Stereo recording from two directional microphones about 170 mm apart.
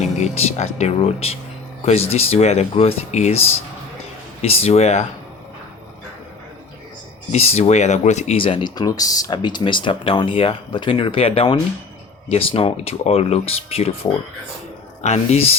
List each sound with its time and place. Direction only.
0.3 s speech: 40° left (ahead or behind)
4.4 s speech: 35° left (ahead or behind)
7.3 s speech: 40° left (ahead or behind)